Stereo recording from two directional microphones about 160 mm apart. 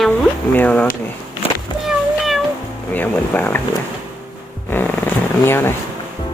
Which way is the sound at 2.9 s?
10° left (ahead or behind).